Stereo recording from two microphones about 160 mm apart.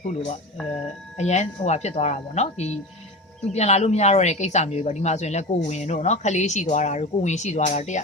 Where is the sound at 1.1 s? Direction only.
45° left (ahead or behind).